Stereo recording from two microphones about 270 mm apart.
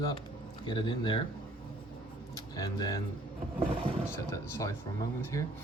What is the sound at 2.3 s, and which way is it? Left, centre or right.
Speech, centre.